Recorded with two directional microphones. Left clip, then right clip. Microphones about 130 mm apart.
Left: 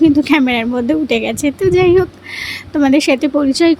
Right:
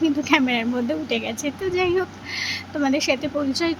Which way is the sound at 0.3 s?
50° left (ahead or behind).